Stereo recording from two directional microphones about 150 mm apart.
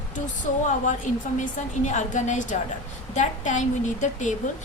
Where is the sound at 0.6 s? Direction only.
55° left (ahead or behind).